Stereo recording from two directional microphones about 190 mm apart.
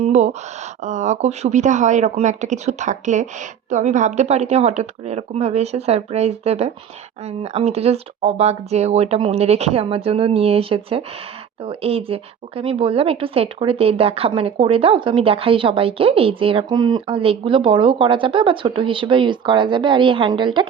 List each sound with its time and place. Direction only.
0.0 s a woman's voice: 40° right (ahead or behind)